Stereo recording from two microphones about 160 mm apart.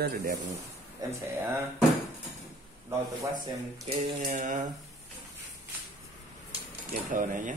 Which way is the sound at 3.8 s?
50° right (ahead or behind).